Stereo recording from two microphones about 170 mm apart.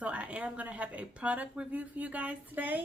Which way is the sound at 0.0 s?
10° right (ahead or behind).